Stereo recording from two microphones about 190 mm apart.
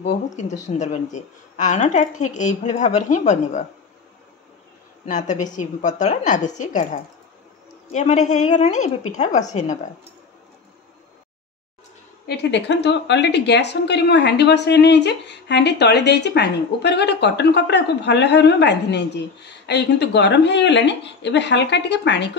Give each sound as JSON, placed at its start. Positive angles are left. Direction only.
{"t": 0.0, "sound": "a woman's voice", "side_deg": 35}
{"t": 5.0, "sound": "a woman's voice", "side_deg": 40}
{"t": 12.3, "sound": "a woman's voice", "side_deg": 65}